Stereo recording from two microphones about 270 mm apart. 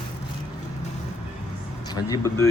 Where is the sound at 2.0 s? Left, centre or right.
Centre.